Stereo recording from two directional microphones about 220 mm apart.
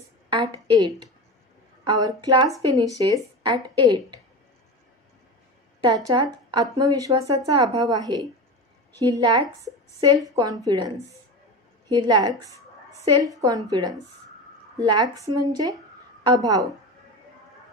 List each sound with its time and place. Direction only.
0.3 s a woman's voice: 20° right (ahead or behind)
5.9 s speech: 15° right (ahead or behind)
11.9 s speech: 15° right (ahead or behind)